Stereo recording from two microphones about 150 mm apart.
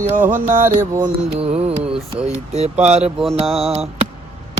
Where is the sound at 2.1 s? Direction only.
45° right (ahead or behind).